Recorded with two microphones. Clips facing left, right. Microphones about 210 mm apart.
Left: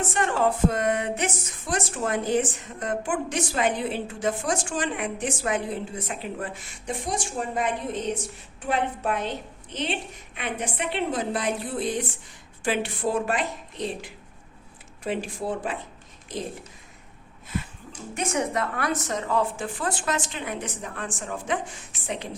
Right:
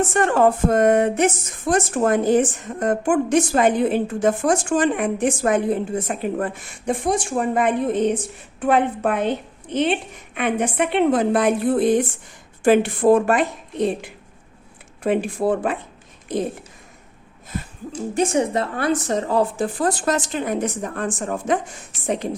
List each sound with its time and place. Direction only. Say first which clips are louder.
0.1 s a woman's voice: right 7 dB; 50° right (ahead or behind)
17.9 s a woman's voice: right 8 dB; 30° right (ahead or behind)